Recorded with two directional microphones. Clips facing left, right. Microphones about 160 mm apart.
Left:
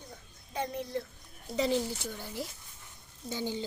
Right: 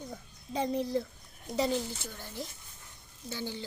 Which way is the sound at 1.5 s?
20° right (ahead or behind).